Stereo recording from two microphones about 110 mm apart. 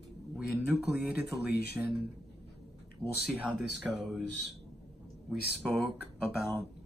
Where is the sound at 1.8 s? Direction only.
10° right (ahead or behind).